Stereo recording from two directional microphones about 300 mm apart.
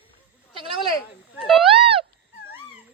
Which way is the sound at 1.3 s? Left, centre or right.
Centre.